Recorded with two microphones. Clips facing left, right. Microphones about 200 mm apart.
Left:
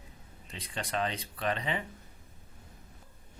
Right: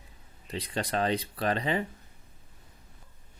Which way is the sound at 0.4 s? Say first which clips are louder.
Right 7 dB; 35° right (ahead or behind).